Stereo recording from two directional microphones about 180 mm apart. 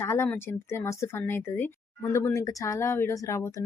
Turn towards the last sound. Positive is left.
turn(degrees=15)  # may be behind; listen again after turning